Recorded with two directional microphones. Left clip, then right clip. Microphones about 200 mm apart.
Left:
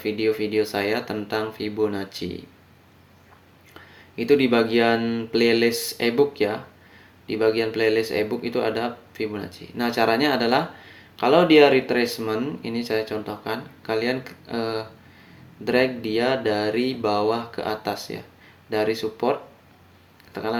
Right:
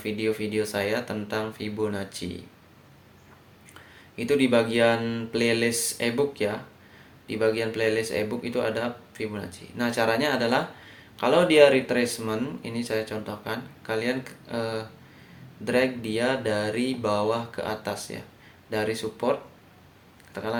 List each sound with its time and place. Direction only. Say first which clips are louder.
0.0 s speech: left 5 dB; 55° left (ahead or behind)
3.8 s speech: left 5 dB; 55° left (ahead or behind)